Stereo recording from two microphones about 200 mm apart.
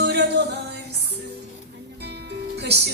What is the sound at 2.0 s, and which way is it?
Music, 55° right (ahead or behind).